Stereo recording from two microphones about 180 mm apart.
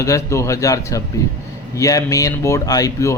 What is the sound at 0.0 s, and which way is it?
A man's voice, 15° left (ahead or behind).